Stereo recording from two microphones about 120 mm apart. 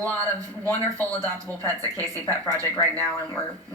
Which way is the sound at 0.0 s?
25° right (ahead or behind).